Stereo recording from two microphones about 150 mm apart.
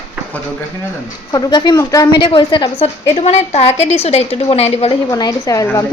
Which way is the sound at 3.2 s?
45° left (ahead or behind).